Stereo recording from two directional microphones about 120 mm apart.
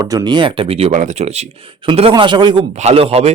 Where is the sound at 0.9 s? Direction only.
75° right (ahead or behind); by 2.6 s 40° right (ahead or behind).